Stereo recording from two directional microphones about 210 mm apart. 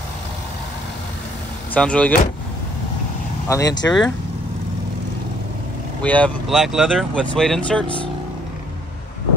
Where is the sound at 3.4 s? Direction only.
15° left (ahead or behind).